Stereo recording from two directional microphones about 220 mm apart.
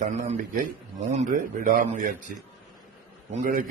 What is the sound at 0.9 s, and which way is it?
A man's voice, 30° right (ahead or behind).